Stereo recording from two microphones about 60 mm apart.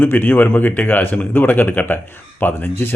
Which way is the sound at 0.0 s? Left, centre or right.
Left.